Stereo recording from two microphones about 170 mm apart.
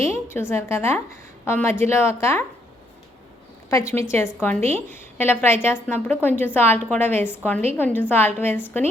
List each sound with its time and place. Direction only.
0.0 s a woman's voice: 15° left (ahead or behind)
3.7 s a woman's voice: 15° left (ahead or behind)